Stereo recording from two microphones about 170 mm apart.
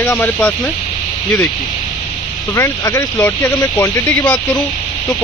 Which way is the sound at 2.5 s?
20° left (ahead or behind).